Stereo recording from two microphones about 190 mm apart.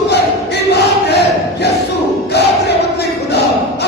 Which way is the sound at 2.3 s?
60° left (ahead or behind).